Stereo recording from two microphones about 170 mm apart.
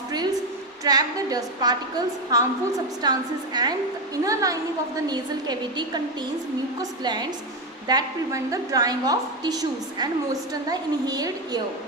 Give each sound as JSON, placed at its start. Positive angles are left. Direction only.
{"t": 0.9, "sound": "a woman's voice", "side_deg": -20}
{"t": 7.0, "sound": "a woman's voice", "side_deg": -25}